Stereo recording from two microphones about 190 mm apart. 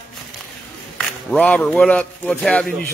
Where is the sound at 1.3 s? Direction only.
5° left (ahead or behind).